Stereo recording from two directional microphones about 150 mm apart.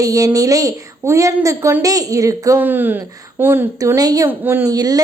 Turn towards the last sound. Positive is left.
turn(degrees=-25)  # may be behind; listen again after turning